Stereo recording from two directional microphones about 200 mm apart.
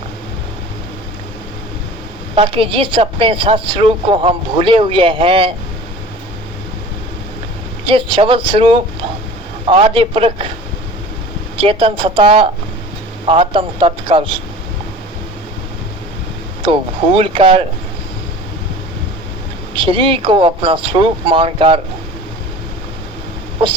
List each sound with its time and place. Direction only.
2.3 s a woman's voice: 30° right (ahead or behind)
7.9 s a woman's voice: 25° right (ahead or behind)
11.5 s a woman's voice: 25° right (ahead or behind)
17.2 s a woman's voice: 25° right (ahead or behind)
19.7 s a woman's voice: 25° right (ahead or behind)